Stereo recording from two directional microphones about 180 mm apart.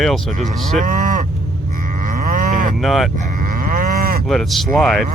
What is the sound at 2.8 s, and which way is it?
Speech, centre (ahead or behind).